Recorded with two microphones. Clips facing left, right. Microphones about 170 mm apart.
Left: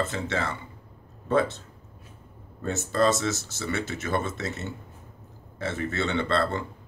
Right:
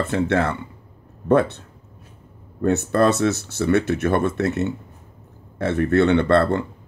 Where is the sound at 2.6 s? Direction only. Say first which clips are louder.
Right 6 dB; 65° right (ahead or behind).